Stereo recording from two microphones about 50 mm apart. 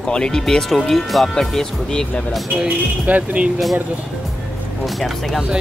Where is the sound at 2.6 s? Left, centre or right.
Right.